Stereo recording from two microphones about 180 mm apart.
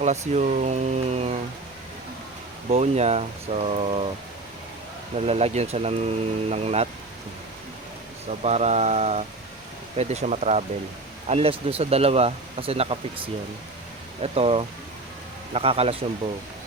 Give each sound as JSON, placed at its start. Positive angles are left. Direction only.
{"t": 0.0, "sound": "speech", "side_deg": -40}
{"t": 2.6, "sound": "speech", "side_deg": -35}
{"t": 5.1, "sound": "speech", "side_deg": -35}
{"t": 8.3, "sound": "speech", "side_deg": -40}